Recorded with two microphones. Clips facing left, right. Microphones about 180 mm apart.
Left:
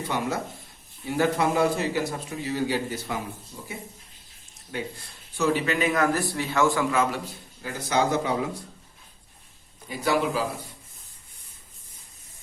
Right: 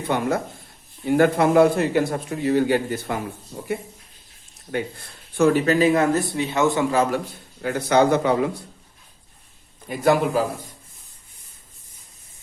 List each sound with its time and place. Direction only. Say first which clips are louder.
0.1 s a man's voice: right 7 dB; 55° right (ahead or behind)
4.7 s speech: right 6 dB; 55° right (ahead or behind); by 6.8 s 20° right (ahead or behind)
6.9 s a man's voice: right 4 dB; 40° right (ahead or behind)
7.6 s a man's voice: right 7 dB; 60° right (ahead or behind)
9.9 s a man's voice: right 6 dB; 50° right (ahead or behind)